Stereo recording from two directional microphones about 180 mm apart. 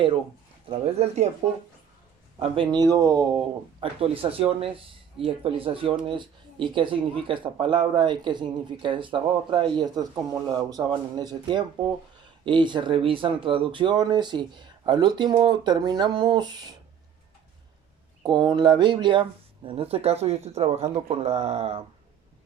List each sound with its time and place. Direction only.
0.7 s speech: 35° right (ahead or behind)
2.4 s speech: 25° right (ahead or behind)
18.2 s speech: 25° right (ahead or behind)